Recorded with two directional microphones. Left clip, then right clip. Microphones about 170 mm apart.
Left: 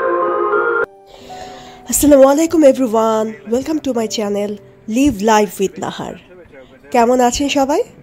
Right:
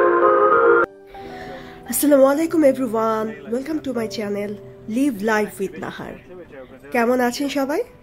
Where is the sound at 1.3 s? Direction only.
25° left (ahead or behind).